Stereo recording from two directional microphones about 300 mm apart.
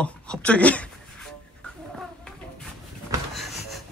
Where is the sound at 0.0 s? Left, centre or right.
Centre.